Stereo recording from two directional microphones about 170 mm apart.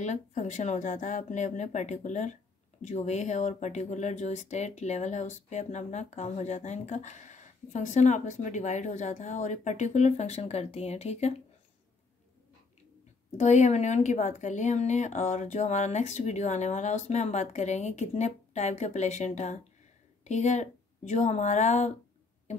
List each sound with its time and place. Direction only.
0.0 s speech: 45° left (ahead or behind)
13.4 s speech: 45° left (ahead or behind)